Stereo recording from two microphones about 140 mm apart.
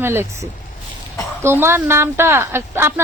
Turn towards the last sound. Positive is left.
turn(degrees=-15)  # may be behind; listen again after turning